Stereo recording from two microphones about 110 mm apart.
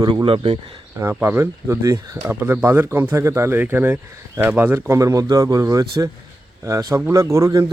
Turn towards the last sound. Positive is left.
turn(degrees=-30)  # may be behind; listen again after turning